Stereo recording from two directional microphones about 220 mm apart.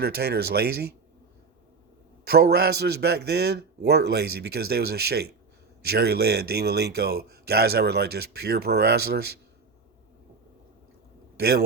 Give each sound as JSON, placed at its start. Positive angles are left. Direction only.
{"t": 0.0, "sound": "a man's voice", "side_deg": -45}
{"t": 2.2, "sound": "a man's voice", "side_deg": -45}
{"t": 11.3, "sound": "a man's voice", "side_deg": -45}